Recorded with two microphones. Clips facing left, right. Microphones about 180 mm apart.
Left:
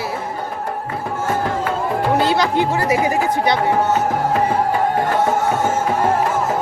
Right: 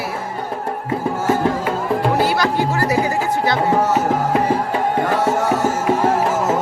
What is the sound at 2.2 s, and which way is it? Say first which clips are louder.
Speech: left 1 dB; 20° left (ahead or behind).